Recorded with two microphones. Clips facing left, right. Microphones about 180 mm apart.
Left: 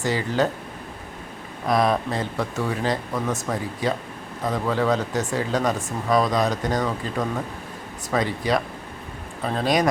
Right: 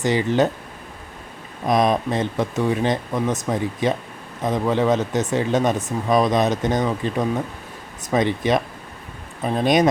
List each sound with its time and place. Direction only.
0.0 s speech: 20° right (ahead or behind)
1.6 s speech: 20° right (ahead or behind)